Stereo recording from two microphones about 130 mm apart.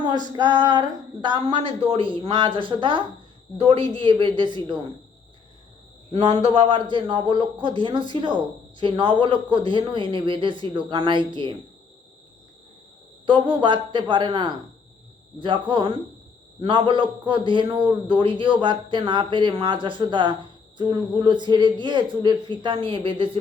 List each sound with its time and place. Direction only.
0.0 s female singing: 30° right (ahead or behind)
0.7 s speech: 35° right (ahead or behind)
6.1 s speech: 55° right (ahead or behind); by 11.5 s 35° right (ahead or behind)
13.2 s speech: 40° right (ahead or behind)